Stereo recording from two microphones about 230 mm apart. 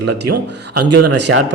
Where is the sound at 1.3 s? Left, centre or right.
Right.